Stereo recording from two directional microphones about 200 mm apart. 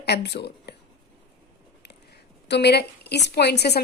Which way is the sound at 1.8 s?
55° left (ahead or behind).